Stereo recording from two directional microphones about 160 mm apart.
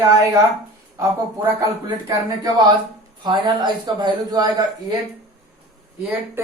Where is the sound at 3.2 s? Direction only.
30° right (ahead or behind).